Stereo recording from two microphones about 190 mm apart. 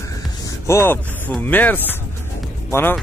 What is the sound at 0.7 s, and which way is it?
Speech, 10° left (ahead or behind).